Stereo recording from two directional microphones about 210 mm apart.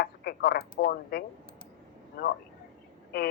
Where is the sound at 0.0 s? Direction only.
50° left (ahead or behind).